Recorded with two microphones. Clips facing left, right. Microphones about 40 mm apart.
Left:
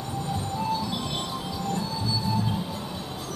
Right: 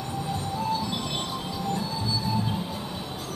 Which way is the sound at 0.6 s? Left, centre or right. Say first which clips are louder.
Even; centre.